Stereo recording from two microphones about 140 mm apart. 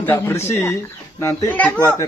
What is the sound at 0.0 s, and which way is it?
A child's voice, 15° left (ahead or behind).